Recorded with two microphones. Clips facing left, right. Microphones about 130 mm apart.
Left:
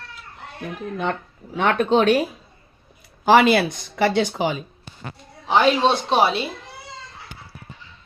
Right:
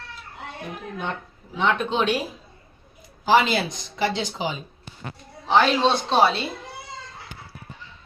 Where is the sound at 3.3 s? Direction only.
60° left (ahead or behind).